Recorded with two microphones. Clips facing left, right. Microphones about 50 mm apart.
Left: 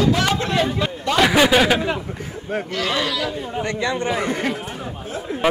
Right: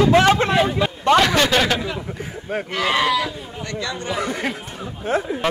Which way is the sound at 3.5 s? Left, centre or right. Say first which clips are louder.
Left 5 dB; left.